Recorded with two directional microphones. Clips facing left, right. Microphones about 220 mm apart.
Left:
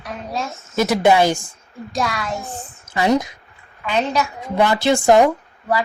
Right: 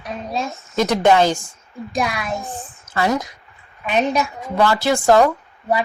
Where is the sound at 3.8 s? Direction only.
20° right (ahead or behind).